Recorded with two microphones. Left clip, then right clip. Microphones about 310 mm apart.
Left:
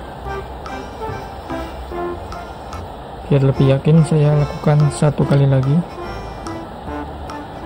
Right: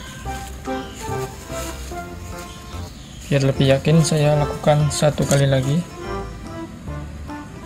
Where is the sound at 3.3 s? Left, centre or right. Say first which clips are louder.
Left 1 dB; centre.